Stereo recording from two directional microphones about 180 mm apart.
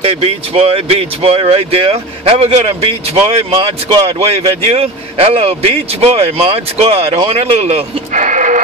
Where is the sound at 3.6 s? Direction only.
30° right (ahead or behind).